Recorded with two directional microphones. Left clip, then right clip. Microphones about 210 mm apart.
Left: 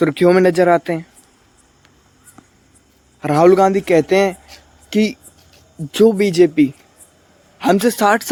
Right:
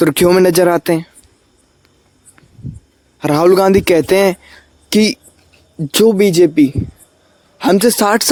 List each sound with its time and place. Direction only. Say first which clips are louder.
0.0 s speech: right 2 dB; 40° right (ahead or behind)
3.2 s speech: right 1 dB; 30° right (ahead or behind)